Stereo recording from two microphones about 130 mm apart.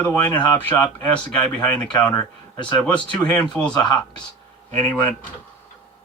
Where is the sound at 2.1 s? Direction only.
30° left (ahead or behind).